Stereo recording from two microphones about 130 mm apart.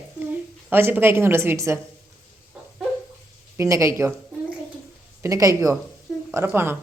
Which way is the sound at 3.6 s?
25° right (ahead or behind).